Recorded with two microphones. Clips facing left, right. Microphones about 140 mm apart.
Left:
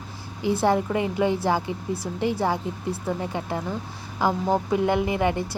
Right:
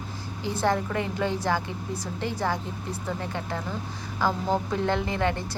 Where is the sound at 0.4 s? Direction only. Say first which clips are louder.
Left 4 dB; 15° left (ahead or behind).